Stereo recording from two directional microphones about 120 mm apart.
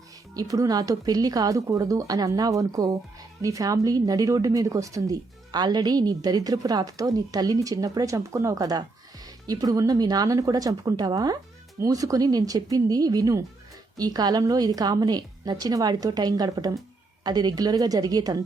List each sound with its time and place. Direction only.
0.3 s speech: 30° right (ahead or behind)